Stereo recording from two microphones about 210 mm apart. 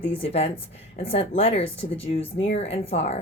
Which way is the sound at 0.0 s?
25° left (ahead or behind).